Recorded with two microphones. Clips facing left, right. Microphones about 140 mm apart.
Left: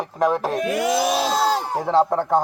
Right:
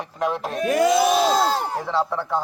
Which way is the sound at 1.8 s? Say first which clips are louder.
Left 6 dB; 40° left (ahead or behind).